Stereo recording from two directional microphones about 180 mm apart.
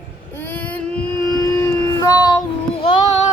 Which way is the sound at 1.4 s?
20° left (ahead or behind).